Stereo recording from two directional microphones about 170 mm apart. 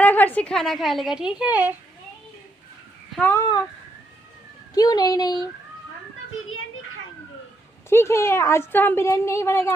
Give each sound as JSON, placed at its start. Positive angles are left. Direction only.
{"t": 0.0, "sound": "a woman's voice", "side_deg": 10}
{"t": 3.2, "sound": "a woman's voice", "side_deg": 10}
{"t": 4.7, "sound": "speech", "side_deg": 20}
{"t": 7.9, "sound": "a woman's voice", "side_deg": 15}